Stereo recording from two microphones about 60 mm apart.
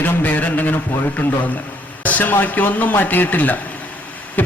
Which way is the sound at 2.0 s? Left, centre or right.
Left.